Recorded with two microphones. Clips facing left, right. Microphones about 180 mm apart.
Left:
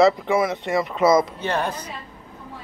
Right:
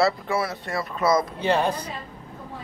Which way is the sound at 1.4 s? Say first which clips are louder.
Right 3 dB; 10° right (ahead or behind).